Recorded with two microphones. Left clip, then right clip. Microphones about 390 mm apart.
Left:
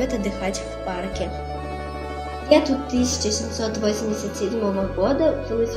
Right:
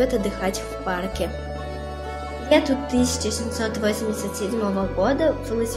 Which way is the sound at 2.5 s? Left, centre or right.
Right.